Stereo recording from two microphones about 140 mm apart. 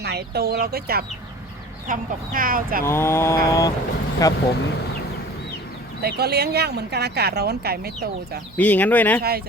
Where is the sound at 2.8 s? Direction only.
20° left (ahead or behind).